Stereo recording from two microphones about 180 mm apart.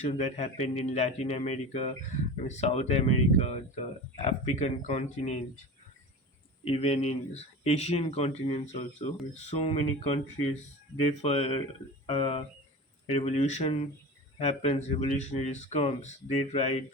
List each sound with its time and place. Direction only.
0.0 s speech: 40° left (ahead or behind)
6.7 s speech: 35° left (ahead or behind)